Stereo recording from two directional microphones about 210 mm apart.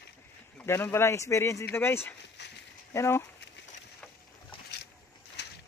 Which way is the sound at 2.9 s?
10° left (ahead or behind).